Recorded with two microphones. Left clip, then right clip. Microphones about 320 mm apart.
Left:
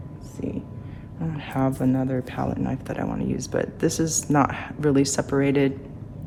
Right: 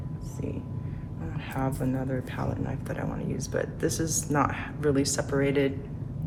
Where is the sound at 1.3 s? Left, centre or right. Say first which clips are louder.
Left 6 dB; left.